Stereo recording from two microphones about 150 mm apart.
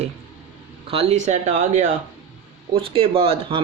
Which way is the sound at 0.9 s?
40° right (ahead or behind).